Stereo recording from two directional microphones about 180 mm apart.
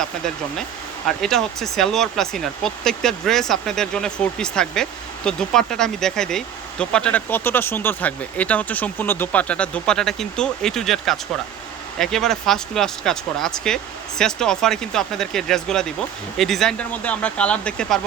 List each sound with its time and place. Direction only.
1.0 s speech: centre (ahead or behind)